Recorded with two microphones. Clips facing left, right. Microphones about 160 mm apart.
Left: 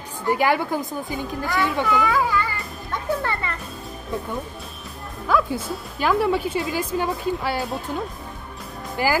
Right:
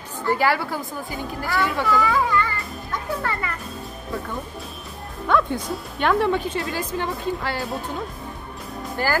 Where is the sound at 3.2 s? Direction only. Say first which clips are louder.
Even; 25° left (ahead or behind).